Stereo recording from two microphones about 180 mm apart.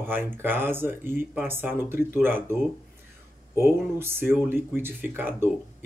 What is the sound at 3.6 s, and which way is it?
Speech, 15° right (ahead or behind).